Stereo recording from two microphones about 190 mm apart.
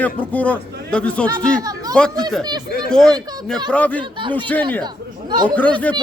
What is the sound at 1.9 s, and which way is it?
A man's voice, 5° left (ahead or behind).